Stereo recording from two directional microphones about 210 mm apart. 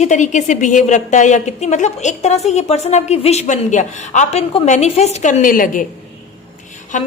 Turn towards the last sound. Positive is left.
turn(degrees=35)  # may be behind; listen again after turning